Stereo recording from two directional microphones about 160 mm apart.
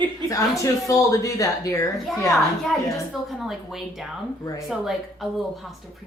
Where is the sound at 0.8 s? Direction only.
20° left (ahead or behind).